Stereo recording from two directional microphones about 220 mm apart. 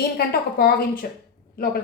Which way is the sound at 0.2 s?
45° left (ahead or behind).